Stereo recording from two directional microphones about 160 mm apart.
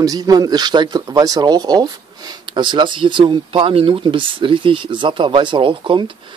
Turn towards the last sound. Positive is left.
turn(degrees=-30)  # may be behind; listen again after turning